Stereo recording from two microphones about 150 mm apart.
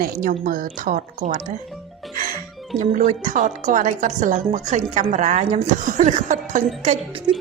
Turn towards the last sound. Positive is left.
turn(degrees=-35)  # may be behind; listen again after turning